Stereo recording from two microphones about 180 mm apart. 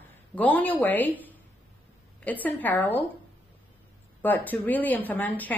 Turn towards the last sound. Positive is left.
turn(degrees=10)  # may be behind; listen again after turning